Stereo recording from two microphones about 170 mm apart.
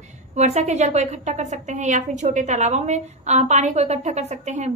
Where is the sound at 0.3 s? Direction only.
40° right (ahead or behind).